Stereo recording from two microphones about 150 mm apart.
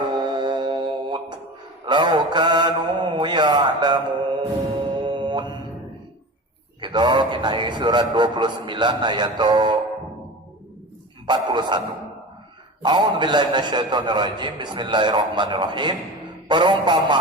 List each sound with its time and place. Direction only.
0.1 s music: 30° right (ahead or behind)
1.9 s mantra: 30° right (ahead or behind)
6.8 s a man's voice: 30° right (ahead or behind)
11.3 s a man's voice: 30° right (ahead or behind)
12.8 s a man's voice: 30° right (ahead or behind)